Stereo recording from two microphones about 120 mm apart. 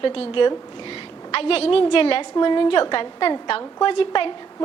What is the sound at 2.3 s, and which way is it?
A woman's voice, 40° left (ahead or behind).